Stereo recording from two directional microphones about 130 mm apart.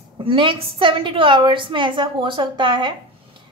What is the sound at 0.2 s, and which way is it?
A woman's voice, 40° right (ahead or behind).